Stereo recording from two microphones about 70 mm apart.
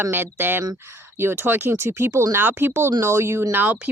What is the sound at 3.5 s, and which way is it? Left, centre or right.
Speech, right.